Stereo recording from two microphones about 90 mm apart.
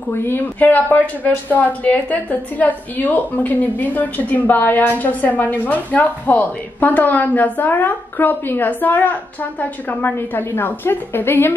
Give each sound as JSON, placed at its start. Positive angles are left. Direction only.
{"t": 0.1, "sound": "a woman's voice", "side_deg": 20}